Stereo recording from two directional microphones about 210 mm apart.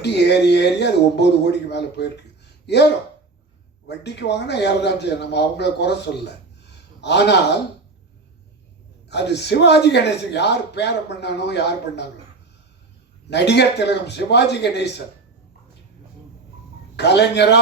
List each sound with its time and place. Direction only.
0.0 s a man's voice: 55° left (ahead or behind)
9.0 s a man's voice: 55° left (ahead or behind)
13.3 s a man's voice: 55° left (ahead or behind)
17.0 s a man's voice: 55° left (ahead or behind)